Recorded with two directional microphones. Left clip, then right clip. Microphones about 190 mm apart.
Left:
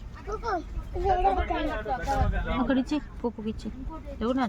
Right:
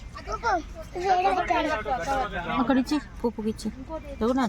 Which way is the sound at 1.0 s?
35° right (ahead or behind).